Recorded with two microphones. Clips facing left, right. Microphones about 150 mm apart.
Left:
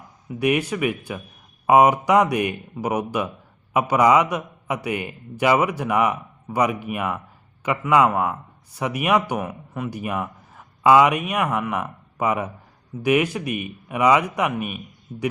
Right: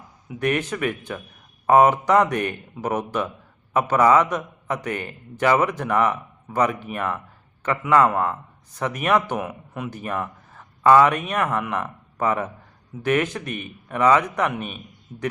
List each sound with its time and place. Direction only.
0.3 s a man's voice: 10° left (ahead or behind)